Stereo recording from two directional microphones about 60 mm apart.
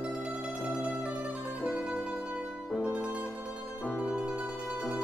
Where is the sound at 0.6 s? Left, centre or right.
Right.